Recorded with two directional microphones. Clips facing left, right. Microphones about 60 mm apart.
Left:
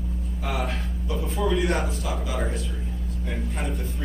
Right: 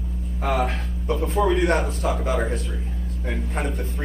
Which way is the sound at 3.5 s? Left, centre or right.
Right.